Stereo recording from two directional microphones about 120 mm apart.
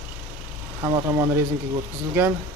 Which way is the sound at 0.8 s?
35° right (ahead or behind).